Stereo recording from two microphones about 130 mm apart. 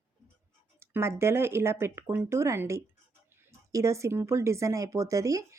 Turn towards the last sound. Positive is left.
turn(degrees=-25)  # may be behind; listen again after turning